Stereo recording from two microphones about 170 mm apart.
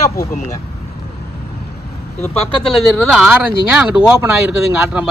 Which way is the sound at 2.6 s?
Centre (ahead or behind).